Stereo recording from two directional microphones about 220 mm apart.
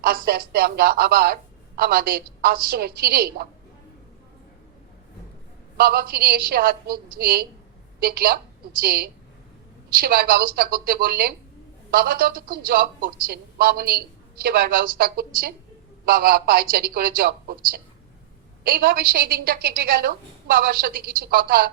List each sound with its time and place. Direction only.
0.0 s speech: 45° right (ahead or behind)
5.7 s a woman's voice: 45° right (ahead or behind)